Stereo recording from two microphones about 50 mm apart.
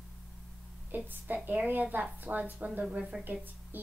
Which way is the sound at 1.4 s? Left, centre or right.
Right.